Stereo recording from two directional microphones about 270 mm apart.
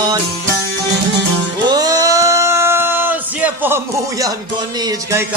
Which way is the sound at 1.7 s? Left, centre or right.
Centre.